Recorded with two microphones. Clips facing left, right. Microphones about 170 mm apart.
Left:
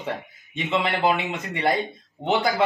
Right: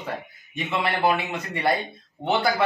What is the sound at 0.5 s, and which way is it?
A man's voice, 20° left (ahead or behind).